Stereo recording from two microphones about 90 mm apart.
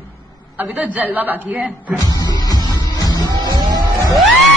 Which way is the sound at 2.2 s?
50° left (ahead or behind).